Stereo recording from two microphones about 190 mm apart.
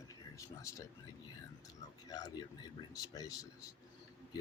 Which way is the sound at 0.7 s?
15° left (ahead or behind).